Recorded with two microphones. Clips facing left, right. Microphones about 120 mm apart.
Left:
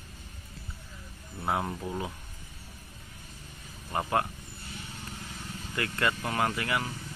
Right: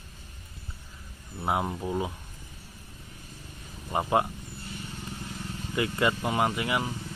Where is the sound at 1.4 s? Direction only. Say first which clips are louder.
Right 2 dB; 15° right (ahead or behind).